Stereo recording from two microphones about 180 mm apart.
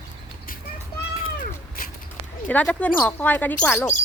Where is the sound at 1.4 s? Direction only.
50° left (ahead or behind).